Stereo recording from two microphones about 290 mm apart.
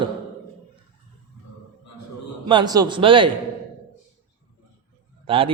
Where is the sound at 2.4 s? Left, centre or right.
Centre.